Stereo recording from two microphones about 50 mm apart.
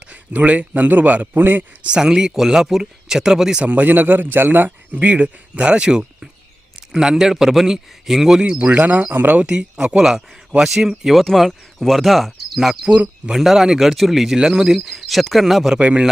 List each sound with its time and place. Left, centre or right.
0.0 s a man's voice: right
1.8 s speech: centre
3.6 s a man's voice: right; by 8.4 s centre
8.4 s a man's voice: right
9.4 s speech: centre
15.8 s speech: right